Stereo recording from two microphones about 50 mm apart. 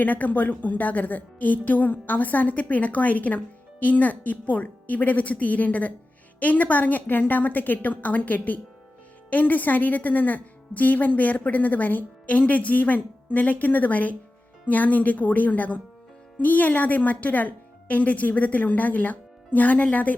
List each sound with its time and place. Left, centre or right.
0.0 s a woman's voice: left